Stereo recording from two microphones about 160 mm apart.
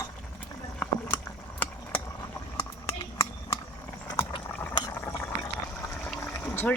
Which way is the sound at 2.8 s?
20° left (ahead or behind).